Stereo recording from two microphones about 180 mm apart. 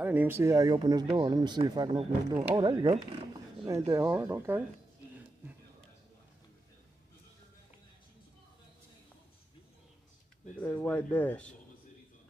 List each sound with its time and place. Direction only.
0.0 s speech: 10° right (ahead or behind)
10.4 s speech: 10° left (ahead or behind)